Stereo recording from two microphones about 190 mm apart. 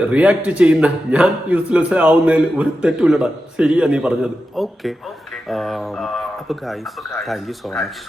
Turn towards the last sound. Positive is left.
turn(degrees=0)  # may be behind; listen again after turning